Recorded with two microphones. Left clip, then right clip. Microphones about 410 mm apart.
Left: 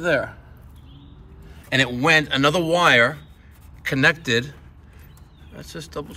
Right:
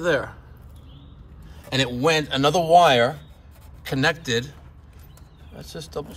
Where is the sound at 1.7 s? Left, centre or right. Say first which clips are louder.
Left 3 dB; centre.